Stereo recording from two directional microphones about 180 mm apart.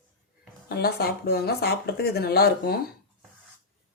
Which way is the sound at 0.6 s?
60° left (ahead or behind).